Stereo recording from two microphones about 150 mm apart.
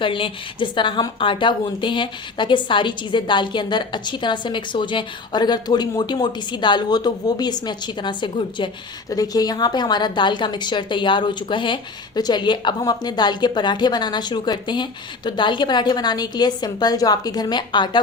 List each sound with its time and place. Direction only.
0.0 s a woman's voice: 35° left (ahead or behind)